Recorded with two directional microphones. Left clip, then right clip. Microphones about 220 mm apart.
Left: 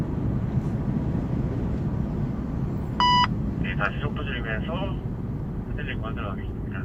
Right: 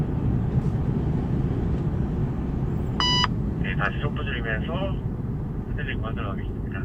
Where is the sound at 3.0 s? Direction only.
15° left (ahead or behind).